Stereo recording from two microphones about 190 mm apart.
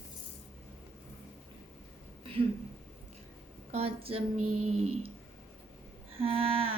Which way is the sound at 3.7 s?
30° right (ahead or behind).